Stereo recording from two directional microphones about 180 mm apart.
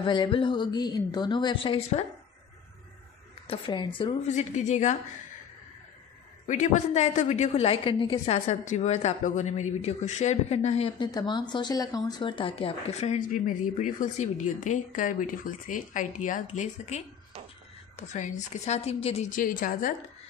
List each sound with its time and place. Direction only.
0.0 s speech: 25° left (ahead or behind)
3.4 s speech: 25° left (ahead or behind)
4.3 s speech: 40° left (ahead or behind)
6.4 s speech: 45° left (ahead or behind)
11.1 s speech: 25° left (ahead or behind)
19.3 s a woman's voice: 50° left (ahead or behind)